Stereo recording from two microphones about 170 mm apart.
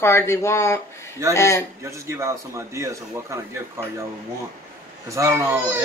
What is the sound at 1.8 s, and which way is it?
Speech, 15° right (ahead or behind).